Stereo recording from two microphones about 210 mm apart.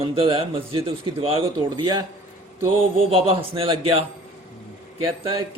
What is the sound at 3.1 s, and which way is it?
A man's voice, 25° right (ahead or behind).